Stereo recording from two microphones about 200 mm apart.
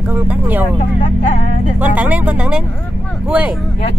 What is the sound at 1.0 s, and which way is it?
Speech, 40° left (ahead or behind).